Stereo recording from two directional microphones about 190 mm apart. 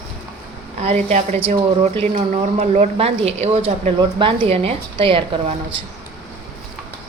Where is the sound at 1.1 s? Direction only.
30° right (ahead or behind).